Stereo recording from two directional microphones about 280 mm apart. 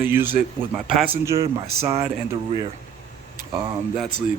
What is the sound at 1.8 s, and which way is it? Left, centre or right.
Speech, right.